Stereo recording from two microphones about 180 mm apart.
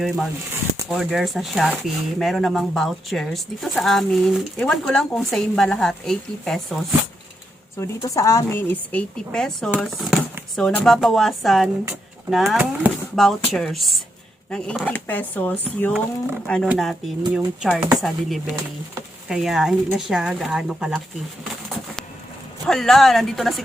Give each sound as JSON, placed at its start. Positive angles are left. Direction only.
{"t": 0.9, "sound": "speech", "side_deg": 0}
{"t": 7.8, "sound": "a woman's voice", "side_deg": 15}
{"t": 22.6, "sound": "speech", "side_deg": 0}